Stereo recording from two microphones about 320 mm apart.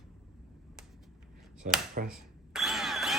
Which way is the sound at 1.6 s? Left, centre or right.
Right.